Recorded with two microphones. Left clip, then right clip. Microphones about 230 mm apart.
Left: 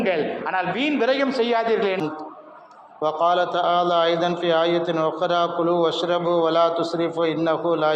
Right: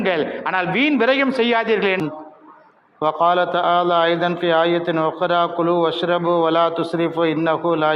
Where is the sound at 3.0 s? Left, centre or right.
Right.